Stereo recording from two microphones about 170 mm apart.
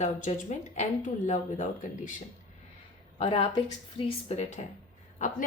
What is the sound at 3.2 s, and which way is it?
A woman's voice, 30° left (ahead or behind).